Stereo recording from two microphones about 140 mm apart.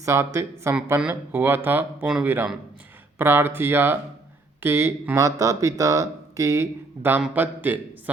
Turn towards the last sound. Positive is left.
turn(degrees=-15)  # may be behind; listen again after turning